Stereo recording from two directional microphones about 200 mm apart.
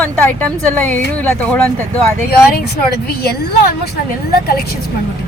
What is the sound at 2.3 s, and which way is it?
Speech, 50° left (ahead or behind).